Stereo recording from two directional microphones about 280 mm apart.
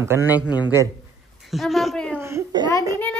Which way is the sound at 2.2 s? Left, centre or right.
Centre.